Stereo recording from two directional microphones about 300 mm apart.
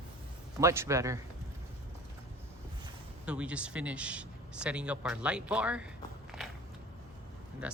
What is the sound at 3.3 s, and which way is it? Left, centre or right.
Speech, centre.